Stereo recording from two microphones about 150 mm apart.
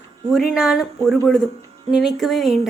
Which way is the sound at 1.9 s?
Centre (ahead or behind).